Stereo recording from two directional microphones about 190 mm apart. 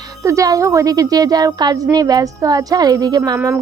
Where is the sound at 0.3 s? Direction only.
15° right (ahead or behind).